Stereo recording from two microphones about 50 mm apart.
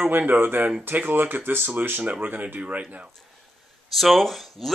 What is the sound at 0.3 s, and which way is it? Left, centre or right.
Speech, right.